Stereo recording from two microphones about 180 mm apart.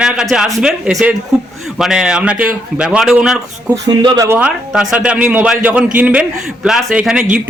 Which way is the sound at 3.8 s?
20° right (ahead or behind).